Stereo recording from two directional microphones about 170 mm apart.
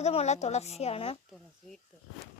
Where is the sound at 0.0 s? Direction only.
40° left (ahead or behind).